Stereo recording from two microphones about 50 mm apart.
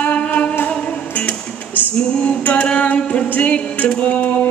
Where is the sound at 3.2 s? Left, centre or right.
Left.